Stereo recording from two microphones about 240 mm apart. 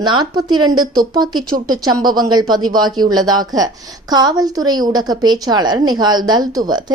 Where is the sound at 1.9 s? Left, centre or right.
Centre.